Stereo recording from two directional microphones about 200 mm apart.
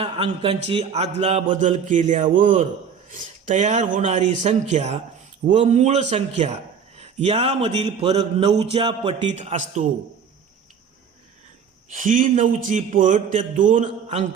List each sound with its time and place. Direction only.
0.0 s a man's voice: 30° right (ahead or behind)
11.9 s a man's voice: 40° right (ahead or behind)